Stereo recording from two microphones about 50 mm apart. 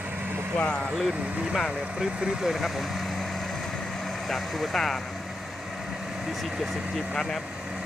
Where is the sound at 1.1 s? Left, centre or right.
Right.